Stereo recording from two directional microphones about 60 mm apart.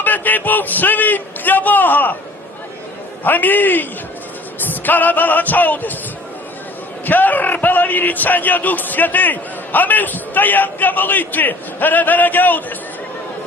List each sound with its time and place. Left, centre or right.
0.0 s speech: left
3.2 s speech: left
7.0 s speech: left